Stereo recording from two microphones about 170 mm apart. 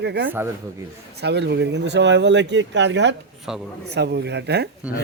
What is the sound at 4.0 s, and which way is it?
Speech, 80° right.